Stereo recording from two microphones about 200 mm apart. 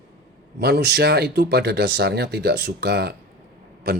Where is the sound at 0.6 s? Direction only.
55° right (ahead or behind).